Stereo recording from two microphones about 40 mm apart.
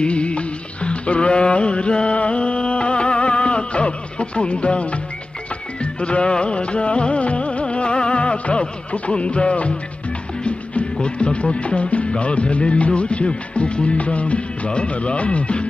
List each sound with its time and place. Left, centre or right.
0.0 s music: left